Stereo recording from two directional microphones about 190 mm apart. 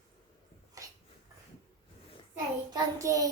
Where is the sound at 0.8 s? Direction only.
20° right (ahead or behind).